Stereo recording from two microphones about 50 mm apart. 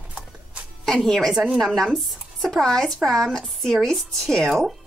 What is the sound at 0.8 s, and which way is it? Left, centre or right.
A woman's voice, centre.